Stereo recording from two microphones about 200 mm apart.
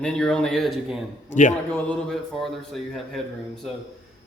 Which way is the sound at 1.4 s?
35° left (ahead or behind).